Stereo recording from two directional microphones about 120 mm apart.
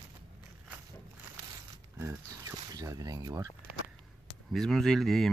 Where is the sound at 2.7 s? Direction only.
30° right (ahead or behind).